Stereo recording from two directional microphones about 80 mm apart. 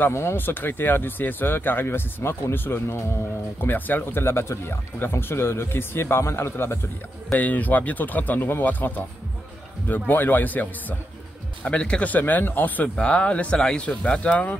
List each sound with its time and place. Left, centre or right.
0.1 s speech: left
7.3 s speech: left